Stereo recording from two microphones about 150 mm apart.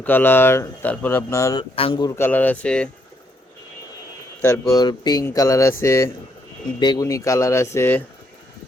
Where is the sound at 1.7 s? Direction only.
35° left (ahead or behind).